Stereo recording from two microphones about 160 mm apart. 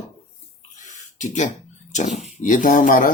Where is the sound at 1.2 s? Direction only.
50° left (ahead or behind).